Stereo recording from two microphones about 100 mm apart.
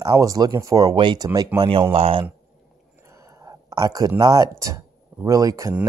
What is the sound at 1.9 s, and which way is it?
Speech, 75° right (ahead or behind).